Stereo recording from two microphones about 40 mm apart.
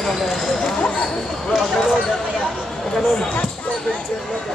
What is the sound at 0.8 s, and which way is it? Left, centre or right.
Speech, left.